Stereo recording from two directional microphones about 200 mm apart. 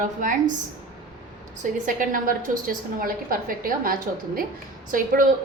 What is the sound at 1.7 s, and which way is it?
A woman's voice, 40° right (ahead or behind).